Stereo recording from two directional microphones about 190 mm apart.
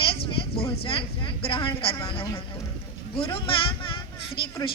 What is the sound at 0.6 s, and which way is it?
Speech, 30° left (ahead or behind).